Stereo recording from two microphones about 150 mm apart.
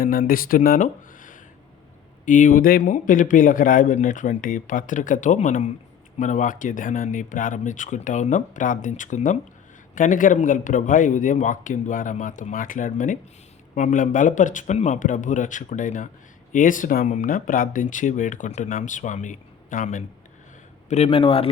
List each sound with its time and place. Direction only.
0.0 s speech: 70° left (ahead or behind); by 20.1 s 55° left (ahead or behind)
20.9 s a man's voice: 40° left (ahead or behind)